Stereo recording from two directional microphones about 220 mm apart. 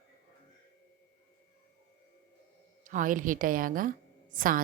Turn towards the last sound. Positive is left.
turn(degrees=-40)  # may be behind; listen again after turning